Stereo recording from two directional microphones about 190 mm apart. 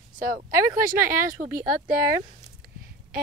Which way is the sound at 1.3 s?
50° right (ahead or behind).